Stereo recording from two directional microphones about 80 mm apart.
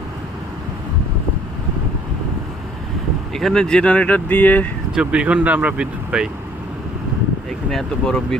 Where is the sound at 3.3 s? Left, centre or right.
Centre.